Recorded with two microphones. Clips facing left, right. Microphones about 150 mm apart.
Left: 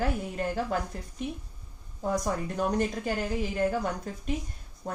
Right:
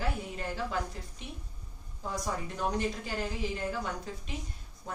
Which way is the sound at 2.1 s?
50° left (ahead or behind).